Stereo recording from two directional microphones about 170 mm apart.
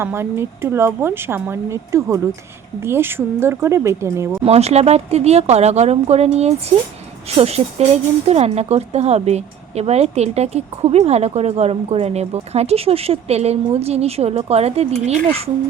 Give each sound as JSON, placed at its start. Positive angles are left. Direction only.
{"t": 0.0, "sound": "speech", "side_deg": -15}
{"t": 4.4, "sound": "a woman's voice", "side_deg": -40}